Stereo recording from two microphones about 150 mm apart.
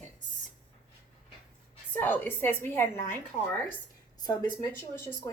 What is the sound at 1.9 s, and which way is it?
A woman's voice, 10° left (ahead or behind).